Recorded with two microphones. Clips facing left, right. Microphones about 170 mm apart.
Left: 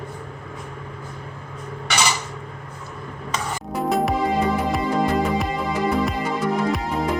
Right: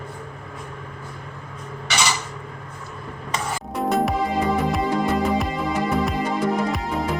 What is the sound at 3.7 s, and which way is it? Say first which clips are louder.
Music: even; centre (ahead or behind).